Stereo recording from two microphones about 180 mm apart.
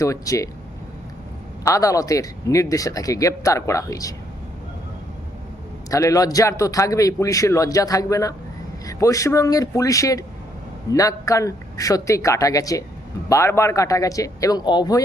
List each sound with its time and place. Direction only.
0.0 s a man's voice: 20° left (ahead or behind)
1.6 s speech: 20° left (ahead or behind)
5.9 s a man's voice: 20° left (ahead or behind)